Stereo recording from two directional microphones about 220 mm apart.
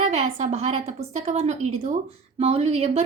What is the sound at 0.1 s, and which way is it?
A woman's voice, 30° right (ahead or behind).